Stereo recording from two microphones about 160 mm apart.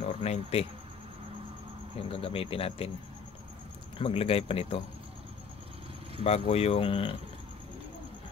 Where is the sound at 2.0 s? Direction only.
35° left (ahead or behind).